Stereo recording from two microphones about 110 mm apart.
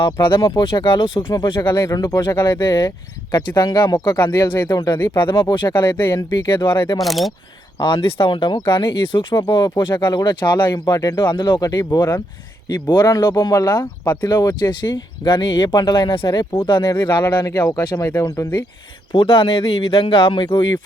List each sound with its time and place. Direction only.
0.0 s speech: 50° left (ahead or behind)
1.9 s speech: 30° left (ahead or behind)
2.3 s speech: 20° left (ahead or behind)
2.6 s speech: 40° left (ahead or behind)
4.9 s speech: 20° left (ahead or behind)
5.2 s speech: 45° left (ahead or behind)
5.9 s speech: 20° left (ahead or behind)
6.1 s speech: 35° left (ahead or behind)
7.0 s speech: centre (ahead or behind)
7.8 s speech: 50° left (ahead or behind)
17.4 s speech: 20° left (ahead or behind)
17.7 s speech: 30° left (ahead or behind)
19.1 s speech: 50° left (ahead or behind)